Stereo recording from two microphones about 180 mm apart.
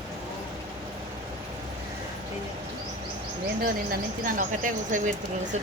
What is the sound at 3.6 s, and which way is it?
A woman's voice, 50° right (ahead or behind).